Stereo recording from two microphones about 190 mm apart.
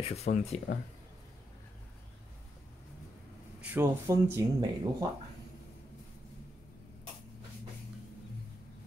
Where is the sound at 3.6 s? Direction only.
10° right (ahead or behind).